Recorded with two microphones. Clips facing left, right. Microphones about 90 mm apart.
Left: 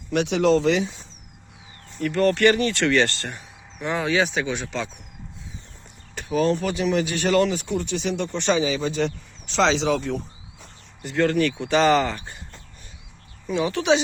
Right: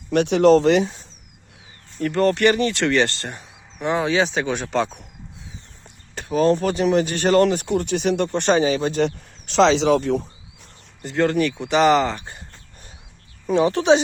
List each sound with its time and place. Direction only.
0.1 s speech: 50° right (ahead or behind)
2.0 s speech: 30° right (ahead or behind)
4.5 s speech: 50° right (ahead or behind)
6.5 s speech: 45° right (ahead or behind)
7.4 s speech: 60° right (ahead or behind)
11.0 s speech: 30° right (ahead or behind)
13.5 s speech: 40° right (ahead or behind)